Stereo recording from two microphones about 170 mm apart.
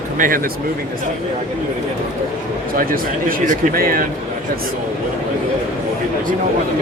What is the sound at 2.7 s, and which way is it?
Speech, 55° right (ahead or behind).